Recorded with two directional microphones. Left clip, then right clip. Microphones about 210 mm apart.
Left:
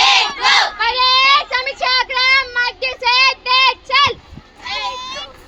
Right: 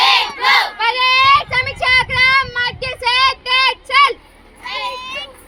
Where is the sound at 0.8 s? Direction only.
50° right (ahead or behind).